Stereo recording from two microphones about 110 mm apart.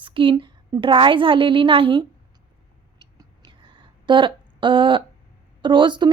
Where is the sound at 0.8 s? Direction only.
50° right (ahead or behind).